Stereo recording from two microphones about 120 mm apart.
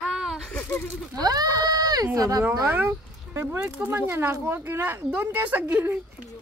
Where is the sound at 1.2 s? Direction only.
35° right (ahead or behind).